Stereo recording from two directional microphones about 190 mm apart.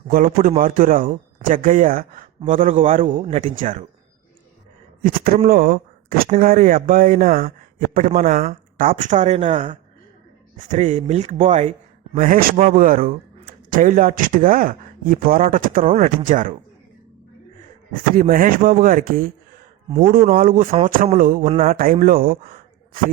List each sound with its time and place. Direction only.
0.1 s speech: 45° right (ahead or behind)
5.0 s speech: 45° right (ahead or behind)
17.9 s speech: 45° right (ahead or behind)